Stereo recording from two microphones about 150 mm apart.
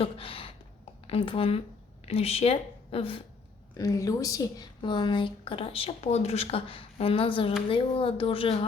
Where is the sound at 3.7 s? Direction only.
25° left (ahead or behind).